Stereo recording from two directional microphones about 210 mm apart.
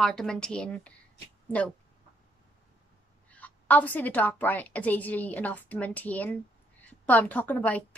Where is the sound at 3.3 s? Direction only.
5° left (ahead or behind).